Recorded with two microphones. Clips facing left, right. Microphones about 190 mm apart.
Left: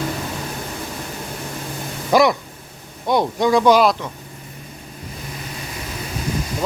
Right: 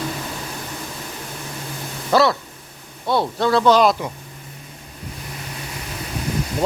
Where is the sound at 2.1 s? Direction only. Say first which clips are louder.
Left 2 dB; 15° left (ahead or behind).